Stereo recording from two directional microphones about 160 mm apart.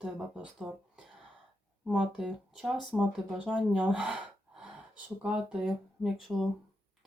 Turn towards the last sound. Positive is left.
turn(degrees=0)  # may be behind; listen again after turning